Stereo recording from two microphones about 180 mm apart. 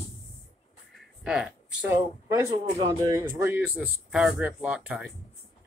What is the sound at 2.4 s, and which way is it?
Speech, 20° right (ahead or behind).